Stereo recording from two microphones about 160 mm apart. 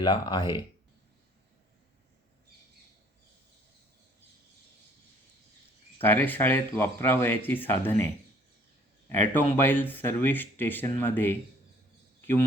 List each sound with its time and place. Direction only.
0.0 s speech: 25° left (ahead or behind)
6.0 s a man's voice: 10° left (ahead or behind)